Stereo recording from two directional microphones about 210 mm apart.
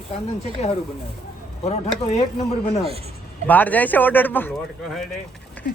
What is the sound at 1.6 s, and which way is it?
Speech, 30° left (ahead or behind).